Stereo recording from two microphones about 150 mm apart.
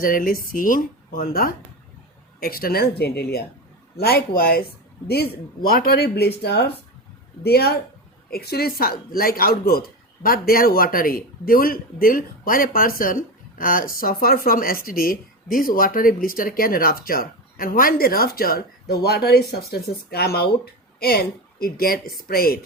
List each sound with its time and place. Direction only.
0.0 s a man's voice: 70° left (ahead or behind); by 9.8 s 90° left
10.2 s a man's voice: 75° left (ahead or behind)